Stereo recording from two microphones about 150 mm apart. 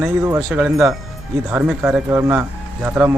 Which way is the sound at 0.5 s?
5° right (ahead or behind).